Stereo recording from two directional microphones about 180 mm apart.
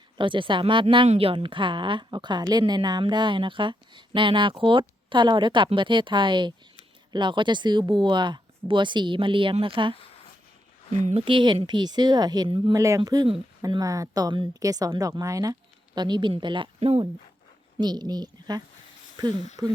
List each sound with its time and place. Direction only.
0.2 s speech: 25° right (ahead or behind)
11.0 s speech: 30° right (ahead or behind)